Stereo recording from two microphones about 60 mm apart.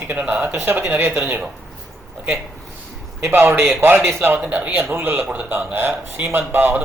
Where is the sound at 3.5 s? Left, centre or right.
Right.